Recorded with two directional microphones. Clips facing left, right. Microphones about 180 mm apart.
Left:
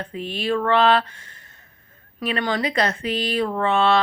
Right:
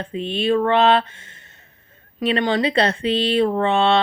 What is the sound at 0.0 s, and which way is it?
Speech, 25° right (ahead or behind).